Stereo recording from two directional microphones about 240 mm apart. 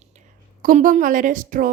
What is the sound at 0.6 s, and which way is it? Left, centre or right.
Speech, right.